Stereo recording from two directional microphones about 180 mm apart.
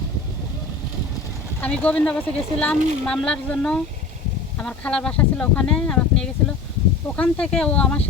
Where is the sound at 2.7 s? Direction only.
40° right (ahead or behind).